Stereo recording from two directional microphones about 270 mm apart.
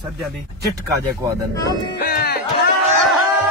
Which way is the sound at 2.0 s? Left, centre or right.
Left.